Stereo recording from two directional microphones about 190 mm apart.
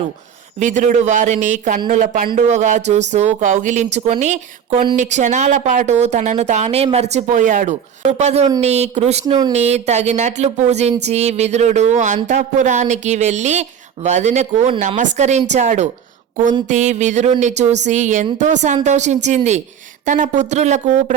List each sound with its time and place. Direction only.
0.6 s speech: 40° right (ahead or behind)